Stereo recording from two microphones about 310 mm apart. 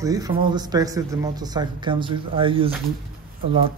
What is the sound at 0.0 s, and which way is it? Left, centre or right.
Speech, centre.